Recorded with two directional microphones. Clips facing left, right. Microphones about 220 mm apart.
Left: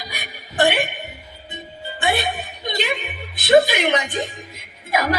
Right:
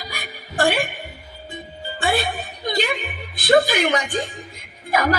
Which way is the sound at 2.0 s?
20° left (ahead or behind).